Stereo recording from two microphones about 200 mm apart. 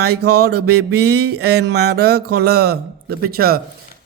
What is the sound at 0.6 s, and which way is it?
Mantra, 90° right.